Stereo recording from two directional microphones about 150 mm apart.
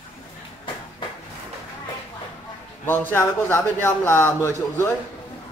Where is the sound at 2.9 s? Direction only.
15° left (ahead or behind).